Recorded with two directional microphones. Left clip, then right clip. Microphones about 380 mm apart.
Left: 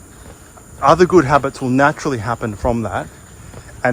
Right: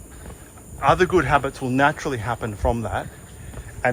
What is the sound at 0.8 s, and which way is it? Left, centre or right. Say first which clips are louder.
Speech: left 7 dB; centre.